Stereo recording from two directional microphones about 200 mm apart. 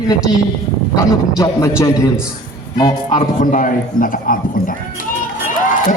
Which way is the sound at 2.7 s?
20° left (ahead or behind).